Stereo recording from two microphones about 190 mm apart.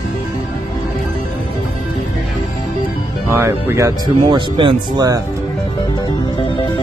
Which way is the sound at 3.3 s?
10° right (ahead or behind).